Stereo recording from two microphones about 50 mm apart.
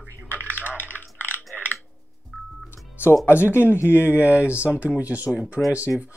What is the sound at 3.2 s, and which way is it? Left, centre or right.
Speech, left.